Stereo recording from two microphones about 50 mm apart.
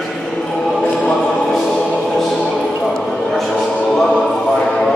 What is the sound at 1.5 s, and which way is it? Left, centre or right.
Music, centre.